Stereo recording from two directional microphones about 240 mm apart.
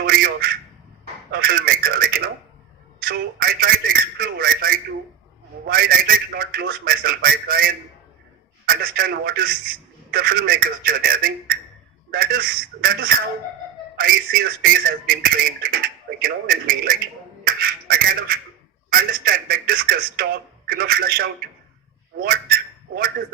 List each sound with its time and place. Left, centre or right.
0.0 s quack: right
1.3 s telephone: right
5.6 s speech: right